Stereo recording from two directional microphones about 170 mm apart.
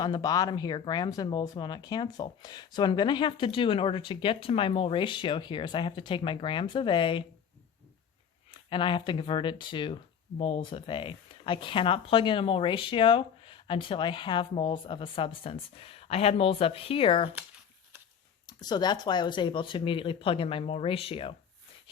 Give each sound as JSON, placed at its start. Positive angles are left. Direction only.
{"t": 0.0, "sound": "speech", "side_deg": 25}
{"t": 8.4, "sound": "speech", "side_deg": 30}
{"t": 18.4, "sound": "speech", "side_deg": 25}